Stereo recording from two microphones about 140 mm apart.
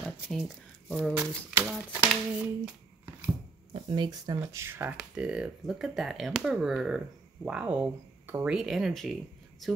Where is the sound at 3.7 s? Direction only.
35° right (ahead or behind).